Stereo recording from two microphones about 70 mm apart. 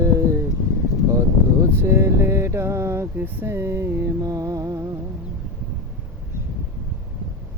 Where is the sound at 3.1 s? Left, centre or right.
Right.